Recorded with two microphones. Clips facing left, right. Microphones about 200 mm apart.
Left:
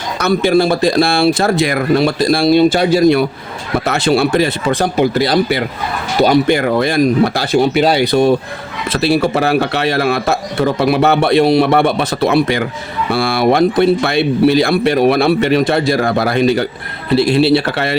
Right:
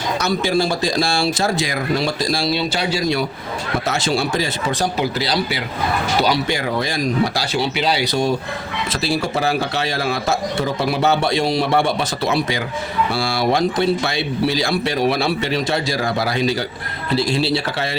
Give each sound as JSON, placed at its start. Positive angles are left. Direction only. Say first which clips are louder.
{"t": 0.2, "sound": "a man's voice", "louder": "left 8 dB", "side_deg": 60}